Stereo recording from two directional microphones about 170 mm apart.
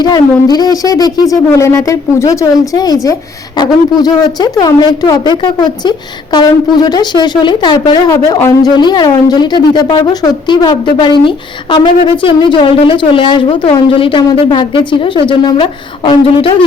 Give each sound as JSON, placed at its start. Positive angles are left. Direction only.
{"t": 0.0, "sound": "a woman's voice", "side_deg": 25}